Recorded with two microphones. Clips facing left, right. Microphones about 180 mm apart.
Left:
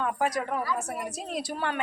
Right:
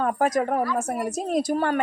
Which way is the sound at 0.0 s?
45° right (ahead or behind).